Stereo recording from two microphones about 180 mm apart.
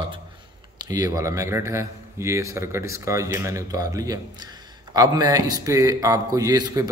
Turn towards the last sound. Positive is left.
turn(degrees=-20)  # may be behind; listen again after turning